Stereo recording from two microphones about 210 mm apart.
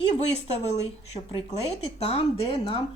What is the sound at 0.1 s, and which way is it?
Speech, 30° left (ahead or behind).